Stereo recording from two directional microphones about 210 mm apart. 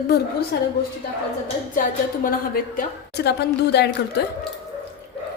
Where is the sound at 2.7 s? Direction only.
50° left (ahead or behind).